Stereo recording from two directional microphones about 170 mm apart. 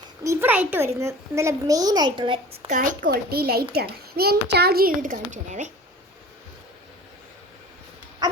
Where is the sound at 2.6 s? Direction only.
50° right (ahead or behind).